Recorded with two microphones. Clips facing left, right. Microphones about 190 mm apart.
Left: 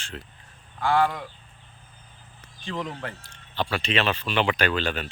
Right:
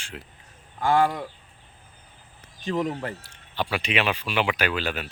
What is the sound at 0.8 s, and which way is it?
Speech, 45° right (ahead or behind).